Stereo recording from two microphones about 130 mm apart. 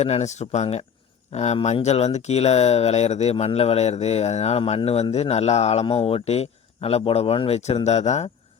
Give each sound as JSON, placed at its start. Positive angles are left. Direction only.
{"t": 0.0, "sound": "speech", "side_deg": 55}